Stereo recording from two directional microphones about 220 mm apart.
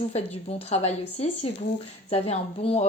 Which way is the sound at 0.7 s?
30° left (ahead or behind).